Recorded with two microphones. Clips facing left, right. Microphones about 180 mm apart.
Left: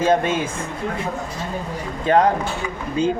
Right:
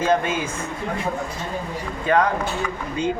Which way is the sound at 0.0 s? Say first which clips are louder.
Left 2 dB; 30° left (ahead or behind).